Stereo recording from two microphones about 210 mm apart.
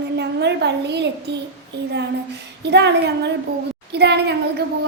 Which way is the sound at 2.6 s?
55° right (ahead or behind).